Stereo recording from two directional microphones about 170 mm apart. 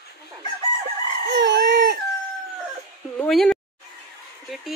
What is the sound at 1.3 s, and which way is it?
Chicken, 90° right.